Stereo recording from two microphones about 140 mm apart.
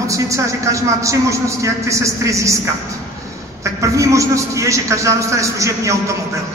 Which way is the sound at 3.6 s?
20° right (ahead or behind).